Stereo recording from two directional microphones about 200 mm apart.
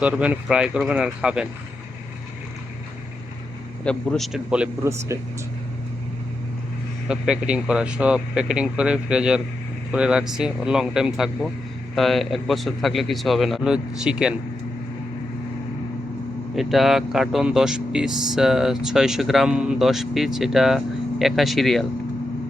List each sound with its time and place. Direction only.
0.0 s speech: 5° right (ahead or behind)
3.8 s speech: centre (ahead or behind)
7.1 s speech: 5° right (ahead or behind)
16.6 s speech: centre (ahead or behind)